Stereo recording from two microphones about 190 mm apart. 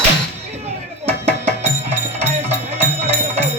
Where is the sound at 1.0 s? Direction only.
35° right (ahead or behind).